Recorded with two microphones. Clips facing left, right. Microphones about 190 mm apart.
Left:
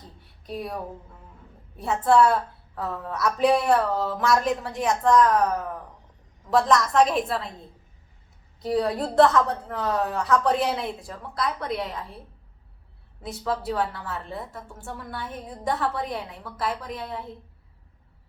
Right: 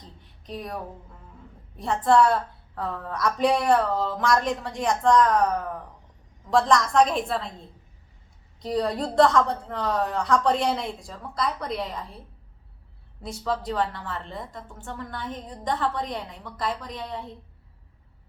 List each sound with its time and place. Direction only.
0.0 s a sound: 10° left (ahead or behind)
1.7 s a woman's voice: 5° left (ahead or behind)
8.6 s a woman's voice: 5° left (ahead or behind)
13.2 s a woman's voice: 5° left (ahead or behind)